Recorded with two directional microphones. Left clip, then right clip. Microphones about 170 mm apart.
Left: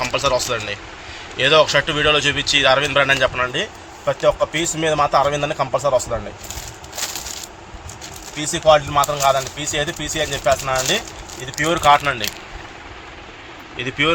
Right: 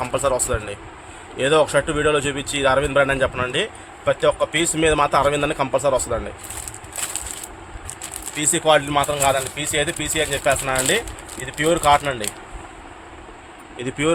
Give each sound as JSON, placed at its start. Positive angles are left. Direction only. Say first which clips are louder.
{"t": 0.0, "sound": "speech", "louder": "left 2 dB", "side_deg": -60}
{"t": 8.4, "sound": "speech", "louder": "left 2 dB", "side_deg": -55}
{"t": 13.7, "sound": "speech", "louder": "left 4 dB", "side_deg": -55}